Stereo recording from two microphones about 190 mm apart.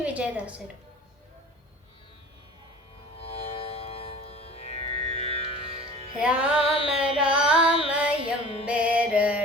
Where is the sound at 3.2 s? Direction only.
30° left (ahead or behind).